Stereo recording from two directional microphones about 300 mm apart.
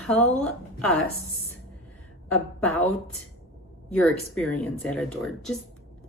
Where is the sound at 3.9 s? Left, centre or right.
Centre.